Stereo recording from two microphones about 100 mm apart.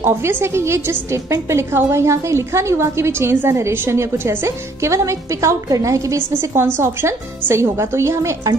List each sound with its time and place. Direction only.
0.0 s a woman's voice: 25° right (ahead or behind)